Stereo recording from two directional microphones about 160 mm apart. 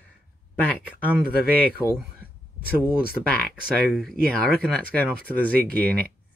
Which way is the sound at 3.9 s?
5° left (ahead or behind).